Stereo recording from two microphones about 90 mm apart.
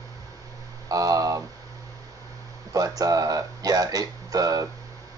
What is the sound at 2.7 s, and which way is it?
Speech, 40° right (ahead or behind).